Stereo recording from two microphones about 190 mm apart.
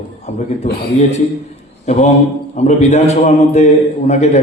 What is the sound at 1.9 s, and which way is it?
A man's voice, 35° left (ahead or behind).